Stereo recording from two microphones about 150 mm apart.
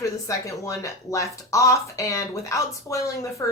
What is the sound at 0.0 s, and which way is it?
Speech, 20° left (ahead or behind).